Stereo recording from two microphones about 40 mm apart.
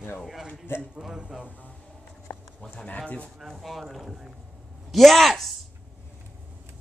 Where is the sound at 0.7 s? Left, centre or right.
Left.